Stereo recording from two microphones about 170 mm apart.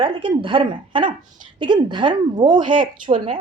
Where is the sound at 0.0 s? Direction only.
30° right (ahead or behind).